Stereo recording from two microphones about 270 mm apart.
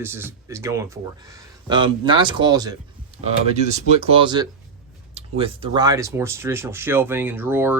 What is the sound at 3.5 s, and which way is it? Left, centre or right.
Speech, right.